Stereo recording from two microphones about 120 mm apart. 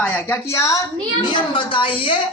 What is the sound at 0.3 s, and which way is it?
Speech, 25° left (ahead or behind).